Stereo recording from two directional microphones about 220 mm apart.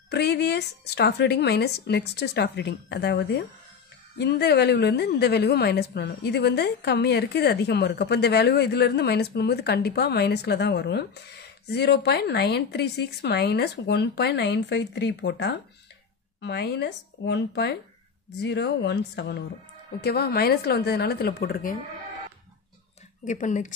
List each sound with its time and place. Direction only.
0.1 s a woman's voice: 50° left (ahead or behind)
23.2 s speech: 35° left (ahead or behind)